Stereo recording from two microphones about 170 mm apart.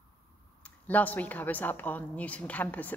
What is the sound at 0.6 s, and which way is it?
A woman's voice, 10° left (ahead or behind).